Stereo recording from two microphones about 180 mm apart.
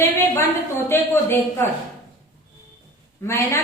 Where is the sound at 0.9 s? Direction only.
15° left (ahead or behind).